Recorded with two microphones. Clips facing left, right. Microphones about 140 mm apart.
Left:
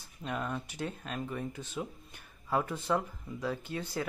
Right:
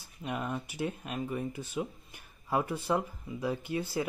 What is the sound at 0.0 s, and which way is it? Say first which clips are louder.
Speech: right 1 dB; 15° right (ahead or behind).